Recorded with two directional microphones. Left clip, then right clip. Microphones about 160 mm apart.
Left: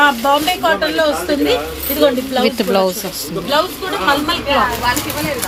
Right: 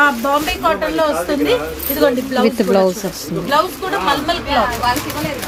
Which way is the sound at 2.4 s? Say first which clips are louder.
Right 2 dB; 25° right (ahead or behind).